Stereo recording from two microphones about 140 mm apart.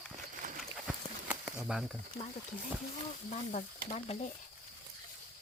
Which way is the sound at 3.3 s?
55° left (ahead or behind).